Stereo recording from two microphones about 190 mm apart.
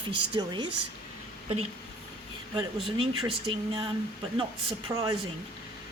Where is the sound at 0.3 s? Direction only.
25° right (ahead or behind).